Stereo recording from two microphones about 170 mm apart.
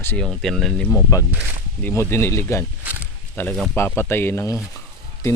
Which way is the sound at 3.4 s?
15° left (ahead or behind).